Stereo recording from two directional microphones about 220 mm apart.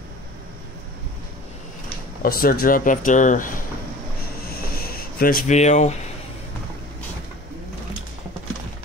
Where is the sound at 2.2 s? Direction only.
40° left (ahead or behind).